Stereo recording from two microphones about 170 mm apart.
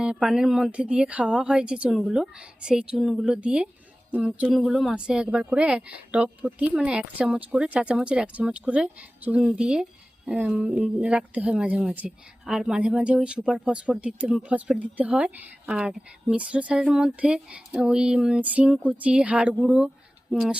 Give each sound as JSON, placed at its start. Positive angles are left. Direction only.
{"t": 0.0, "sound": "a woman's voice", "side_deg": -5}